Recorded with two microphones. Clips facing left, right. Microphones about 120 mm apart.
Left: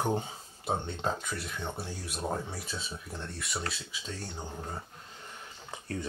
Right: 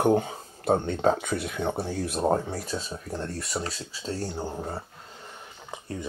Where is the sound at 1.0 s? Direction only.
60° right (ahead or behind).